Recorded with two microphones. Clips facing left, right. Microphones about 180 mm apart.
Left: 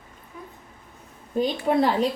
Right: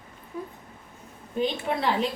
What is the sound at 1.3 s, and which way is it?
Speech, 40° left (ahead or behind).